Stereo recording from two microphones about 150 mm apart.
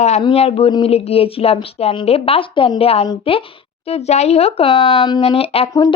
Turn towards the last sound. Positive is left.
turn(degrees=40)  # may be behind; listen again after turning